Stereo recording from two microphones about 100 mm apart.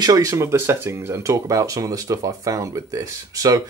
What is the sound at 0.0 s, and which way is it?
Speech, 35° right (ahead or behind).